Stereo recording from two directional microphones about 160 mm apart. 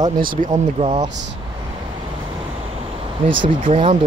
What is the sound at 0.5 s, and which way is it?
Speech, 35° right (ahead or behind).